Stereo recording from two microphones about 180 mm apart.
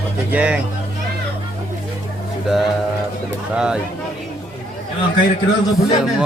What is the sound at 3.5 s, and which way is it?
Speech, 5° right (ahead or behind).